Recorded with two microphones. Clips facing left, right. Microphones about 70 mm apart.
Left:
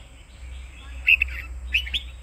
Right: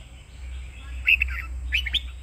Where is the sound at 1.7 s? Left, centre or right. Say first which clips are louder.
Even; right.